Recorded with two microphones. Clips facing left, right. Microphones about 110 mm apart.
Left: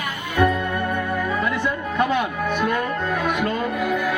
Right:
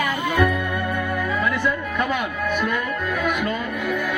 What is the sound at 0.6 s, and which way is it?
Music, 5° right (ahead or behind).